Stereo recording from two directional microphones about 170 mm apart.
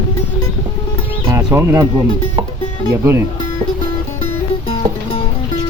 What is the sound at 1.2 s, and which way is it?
Bird, 15° right (ahead or behind).